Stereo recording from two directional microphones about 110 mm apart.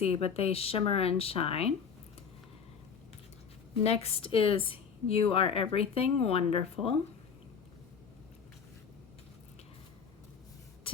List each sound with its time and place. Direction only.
0.0 s a woman's voice: 65° left (ahead or behind)
3.8 s a woman's voice: 65° left (ahead or behind)